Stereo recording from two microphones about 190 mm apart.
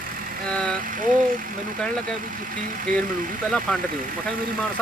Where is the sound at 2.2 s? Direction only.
45° right (ahead or behind).